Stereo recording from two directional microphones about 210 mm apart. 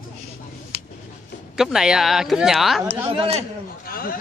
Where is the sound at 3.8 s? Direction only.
45° left (ahead or behind).